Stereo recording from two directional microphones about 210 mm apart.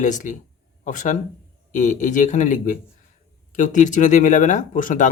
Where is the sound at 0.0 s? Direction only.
35° left (ahead or behind).